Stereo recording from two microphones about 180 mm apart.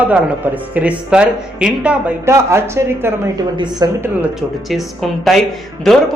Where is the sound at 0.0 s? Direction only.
10° right (ahead or behind).